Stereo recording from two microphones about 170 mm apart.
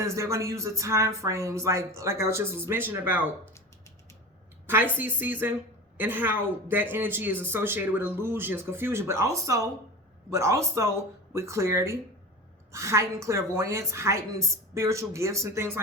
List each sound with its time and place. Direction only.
0.0 s speech: 15° right (ahead or behind)
4.6 s a woman's voice: 10° right (ahead or behind)